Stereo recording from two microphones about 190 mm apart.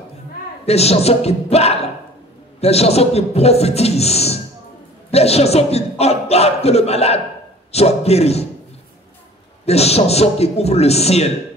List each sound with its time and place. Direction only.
0.7 s a man's voice: 35° left (ahead or behind)
9.7 s a man's voice: 35° left (ahead or behind)